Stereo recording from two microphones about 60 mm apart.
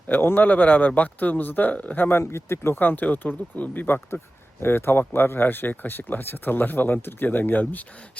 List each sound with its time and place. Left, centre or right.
0.1 s speech: left
2.7 s speech: left